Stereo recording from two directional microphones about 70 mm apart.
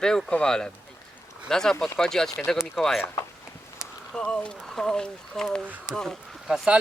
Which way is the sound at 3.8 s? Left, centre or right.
Centre.